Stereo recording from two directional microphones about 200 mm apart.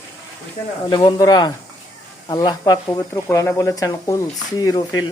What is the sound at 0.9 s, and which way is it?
Speech, 20° left (ahead or behind).